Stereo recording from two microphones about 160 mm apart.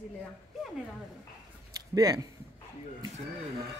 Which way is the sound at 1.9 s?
25° right (ahead or behind).